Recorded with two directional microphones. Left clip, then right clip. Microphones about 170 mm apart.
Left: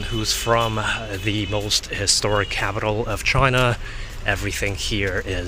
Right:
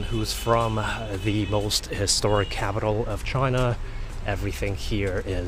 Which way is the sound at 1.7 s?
25° right (ahead or behind).